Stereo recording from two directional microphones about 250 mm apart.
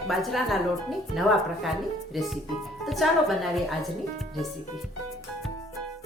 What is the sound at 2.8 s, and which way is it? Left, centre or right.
Speech, centre.